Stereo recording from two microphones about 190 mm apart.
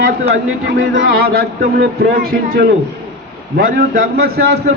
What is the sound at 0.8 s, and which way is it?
Speech, 90° right.